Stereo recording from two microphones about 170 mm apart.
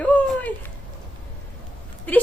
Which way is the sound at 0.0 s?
10° left (ahead or behind).